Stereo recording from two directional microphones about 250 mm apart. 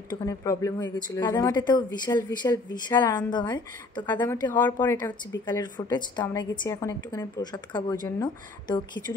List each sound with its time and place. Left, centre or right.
0.1 s a woman's voice: centre